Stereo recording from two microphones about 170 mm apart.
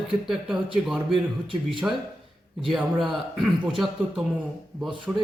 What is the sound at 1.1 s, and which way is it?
Speech, 30° right (ahead or behind).